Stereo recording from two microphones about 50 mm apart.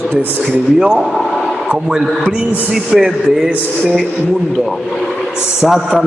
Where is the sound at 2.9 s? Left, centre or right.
Centre.